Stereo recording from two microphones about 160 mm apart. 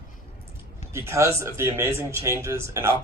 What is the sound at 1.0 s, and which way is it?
A man's voice, 15° right (ahead or behind).